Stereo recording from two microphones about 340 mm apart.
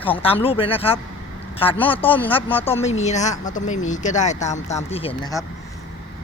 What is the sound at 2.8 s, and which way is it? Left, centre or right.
Speech, centre.